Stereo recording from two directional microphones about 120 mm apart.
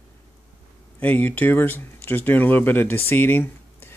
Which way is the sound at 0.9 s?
15° left (ahead or behind).